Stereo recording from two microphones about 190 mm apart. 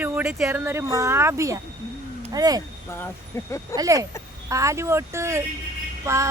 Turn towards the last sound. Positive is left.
turn(degrees=-15)  # may be behind; listen again after turning